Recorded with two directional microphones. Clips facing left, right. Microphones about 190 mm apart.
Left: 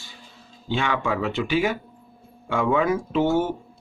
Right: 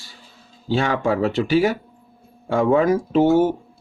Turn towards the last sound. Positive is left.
turn(degrees=-40)  # may be behind; listen again after turning